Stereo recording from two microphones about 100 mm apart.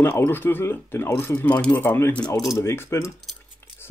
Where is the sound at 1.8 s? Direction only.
25° left (ahead or behind).